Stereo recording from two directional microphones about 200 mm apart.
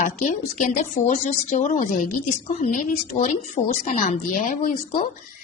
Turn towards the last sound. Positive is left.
turn(degrees=40)  # may be behind; listen again after turning